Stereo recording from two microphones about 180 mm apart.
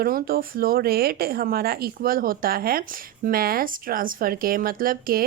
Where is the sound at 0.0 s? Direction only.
55° right (ahead or behind).